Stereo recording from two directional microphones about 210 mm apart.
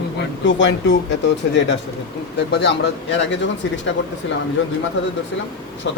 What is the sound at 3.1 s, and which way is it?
Speech, 60° left (ahead or behind).